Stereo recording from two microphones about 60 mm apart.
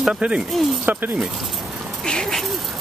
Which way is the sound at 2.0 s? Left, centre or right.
Centre.